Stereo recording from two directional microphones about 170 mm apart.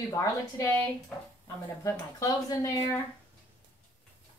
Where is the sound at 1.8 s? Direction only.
20° left (ahead or behind).